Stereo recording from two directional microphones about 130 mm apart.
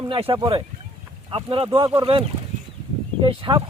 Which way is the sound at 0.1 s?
45° right (ahead or behind).